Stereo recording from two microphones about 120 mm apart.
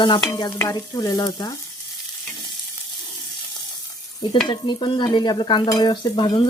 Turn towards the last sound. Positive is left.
turn(degrees=40)  # may be behind; listen again after turning